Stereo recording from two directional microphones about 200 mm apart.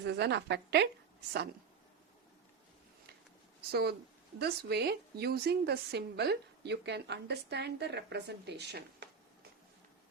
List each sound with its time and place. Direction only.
0.0 s a woman's voice: 60° right (ahead or behind)
3.7 s a woman's voice: 50° right (ahead or behind)